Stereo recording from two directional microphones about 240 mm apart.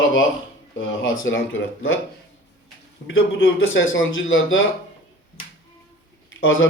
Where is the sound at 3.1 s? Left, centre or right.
Left.